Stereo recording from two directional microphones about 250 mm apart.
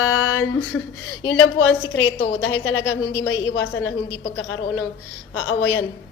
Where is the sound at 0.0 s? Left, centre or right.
Left.